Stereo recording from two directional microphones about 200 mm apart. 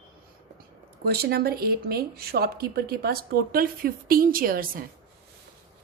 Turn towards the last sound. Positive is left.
turn(degrees=-45)  # may be behind; listen again after turning